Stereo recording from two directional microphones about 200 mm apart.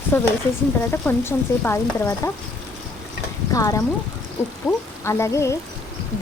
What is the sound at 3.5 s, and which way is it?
Speech, 15° left (ahead or behind).